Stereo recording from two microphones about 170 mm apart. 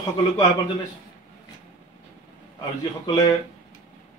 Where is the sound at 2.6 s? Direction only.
20° left (ahead or behind).